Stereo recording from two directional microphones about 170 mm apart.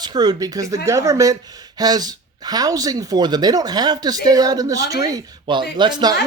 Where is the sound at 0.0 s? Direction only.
25° right (ahead or behind).